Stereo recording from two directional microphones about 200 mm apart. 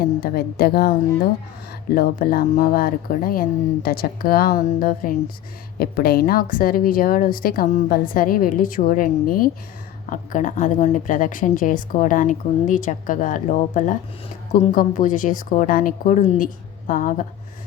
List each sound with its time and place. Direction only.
0.2 s a woman's voice: 50° left (ahead or behind)